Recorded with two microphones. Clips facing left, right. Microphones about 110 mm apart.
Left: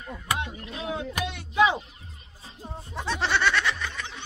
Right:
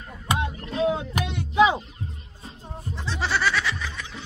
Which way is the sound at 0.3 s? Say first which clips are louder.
Right 4 dB; 30° right (ahead or behind).